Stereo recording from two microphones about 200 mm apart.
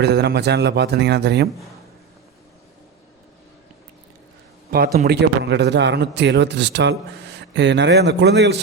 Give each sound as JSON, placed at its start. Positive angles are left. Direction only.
{"t": 0.0, "sound": "a man's voice", "side_deg": -55}
{"t": 5.0, "sound": "a man's voice", "side_deg": -55}